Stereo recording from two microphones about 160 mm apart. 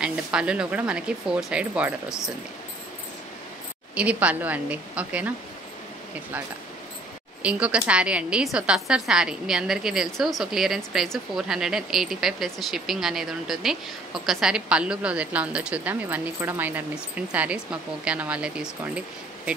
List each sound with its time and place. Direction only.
0.0 s speech: 5° right (ahead or behind)
3.9 s speech: 10° right (ahead or behind)
7.4 s a woman's voice: 5° right (ahead or behind)